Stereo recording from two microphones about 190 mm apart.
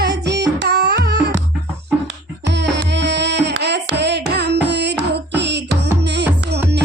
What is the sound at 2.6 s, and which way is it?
Music, 65° right (ahead or behind).